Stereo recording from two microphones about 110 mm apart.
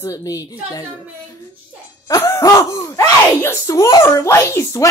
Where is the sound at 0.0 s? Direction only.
30° left (ahead or behind).